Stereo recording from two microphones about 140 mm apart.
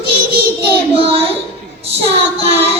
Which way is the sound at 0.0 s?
90° right.